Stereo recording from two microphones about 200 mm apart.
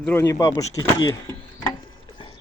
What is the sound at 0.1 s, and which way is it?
Speech, 15° left (ahead or behind).